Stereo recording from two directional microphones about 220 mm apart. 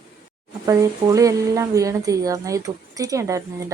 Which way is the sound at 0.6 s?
15° right (ahead or behind).